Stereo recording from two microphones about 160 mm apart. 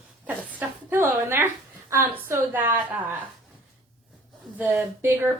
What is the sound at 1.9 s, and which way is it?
Speech, 15° right (ahead or behind).